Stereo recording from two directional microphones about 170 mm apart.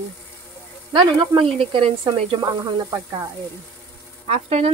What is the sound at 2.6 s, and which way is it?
Speech, 20° right (ahead or behind).